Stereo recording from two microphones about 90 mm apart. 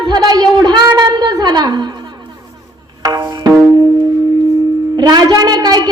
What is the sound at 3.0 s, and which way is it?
Music, 45° right (ahead or behind).